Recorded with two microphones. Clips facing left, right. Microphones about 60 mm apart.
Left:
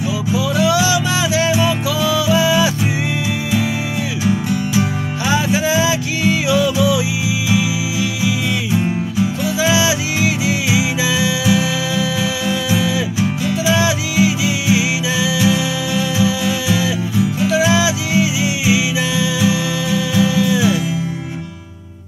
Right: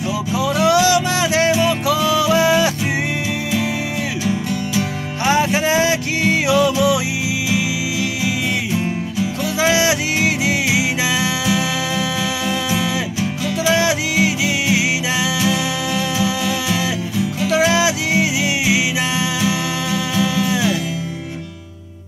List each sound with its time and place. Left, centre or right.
0.4 s music: right
5.2 s music: right
9.6 s music: right
13.7 s music: right